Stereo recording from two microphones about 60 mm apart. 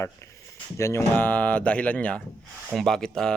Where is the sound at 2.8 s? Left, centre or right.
Centre.